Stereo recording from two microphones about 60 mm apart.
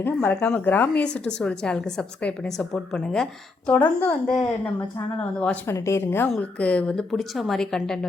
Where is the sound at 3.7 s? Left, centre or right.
Left.